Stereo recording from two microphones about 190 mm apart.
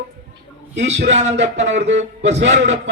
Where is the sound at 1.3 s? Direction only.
70° right (ahead or behind).